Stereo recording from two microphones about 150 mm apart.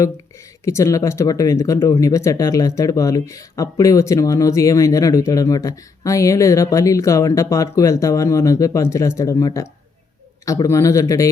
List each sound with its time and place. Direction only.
0.6 s speech: 20° left (ahead or behind)